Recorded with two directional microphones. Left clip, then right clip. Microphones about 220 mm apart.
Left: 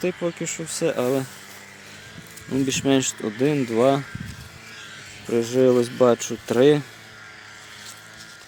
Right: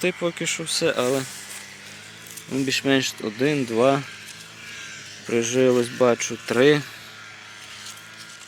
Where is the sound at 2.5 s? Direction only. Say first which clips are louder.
Even; 15° left (ahead or behind).